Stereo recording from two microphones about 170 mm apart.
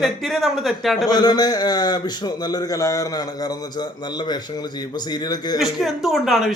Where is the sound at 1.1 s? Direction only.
25° left (ahead or behind).